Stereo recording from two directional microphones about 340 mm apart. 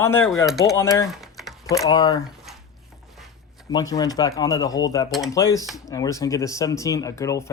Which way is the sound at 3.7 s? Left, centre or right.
Centre.